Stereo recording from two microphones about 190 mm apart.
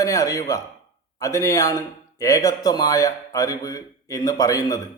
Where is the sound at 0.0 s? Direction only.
15° left (ahead or behind).